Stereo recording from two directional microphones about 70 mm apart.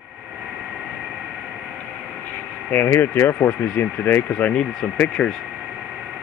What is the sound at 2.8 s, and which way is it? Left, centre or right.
Speech, left.